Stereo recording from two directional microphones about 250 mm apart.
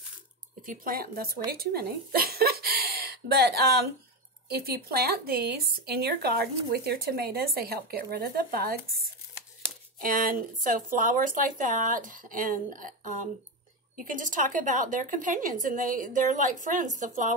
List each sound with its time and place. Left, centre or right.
0.6 s a woman's voice: right
10.0 s speech: right